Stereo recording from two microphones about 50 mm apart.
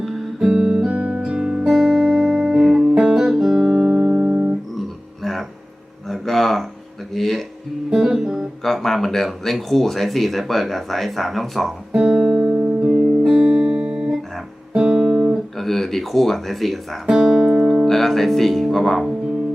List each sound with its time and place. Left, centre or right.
0.0 s guitar: centre
0.9 s music: right
1.2 s guitar: centre
3.7 s music: centre
5.2 s music: centre
6.1 s a sound: centre
7.1 s music: centre
7.9 s guitar: centre
8.6 s speech: centre
11.9 s music: centre
14.7 s guitar: centre
15.5 s speech: centre
17.2 s music: centre
17.8 s speech: centre